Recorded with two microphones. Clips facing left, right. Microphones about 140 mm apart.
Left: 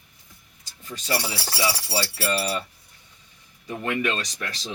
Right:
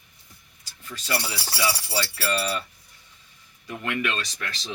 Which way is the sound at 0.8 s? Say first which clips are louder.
Left 2 dB; 35° left (ahead or behind).